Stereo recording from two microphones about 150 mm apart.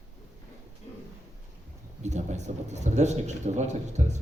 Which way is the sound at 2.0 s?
50° right (ahead or behind).